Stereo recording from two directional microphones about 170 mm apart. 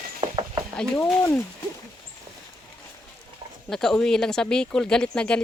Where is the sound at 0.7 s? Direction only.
5° left (ahead or behind).